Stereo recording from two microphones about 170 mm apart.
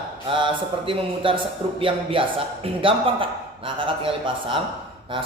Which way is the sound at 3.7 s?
30° right (ahead or behind).